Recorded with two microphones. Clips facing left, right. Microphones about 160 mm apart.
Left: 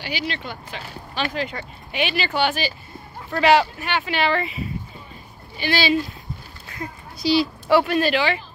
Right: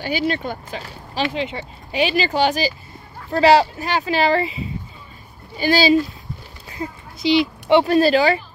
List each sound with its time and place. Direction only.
0.3 s speech: 45° right (ahead or behind)
1.3 s speech: 25° right (ahead or behind)
2.0 s speech: 35° right (ahead or behind)
5.6 s speech: 40° right (ahead or behind)
6.8 s speech: 20° right (ahead or behind)
7.8 s speech: 35° right (ahead or behind)